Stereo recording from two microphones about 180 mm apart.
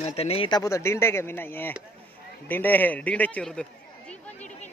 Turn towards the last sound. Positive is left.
turn(degrees=5)  # may be behind; listen again after turning